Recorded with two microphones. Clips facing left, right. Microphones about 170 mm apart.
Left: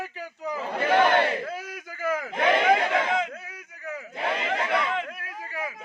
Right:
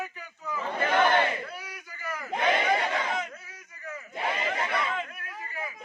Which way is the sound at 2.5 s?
65° left (ahead or behind).